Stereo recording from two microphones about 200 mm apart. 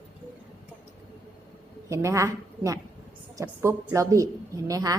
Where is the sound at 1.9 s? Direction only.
15° right (ahead or behind).